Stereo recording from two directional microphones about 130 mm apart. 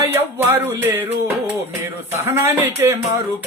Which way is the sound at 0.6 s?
15° right (ahead or behind).